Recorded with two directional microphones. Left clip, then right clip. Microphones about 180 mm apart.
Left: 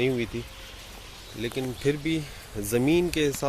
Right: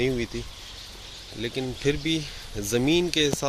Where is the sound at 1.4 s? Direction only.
10° right (ahead or behind).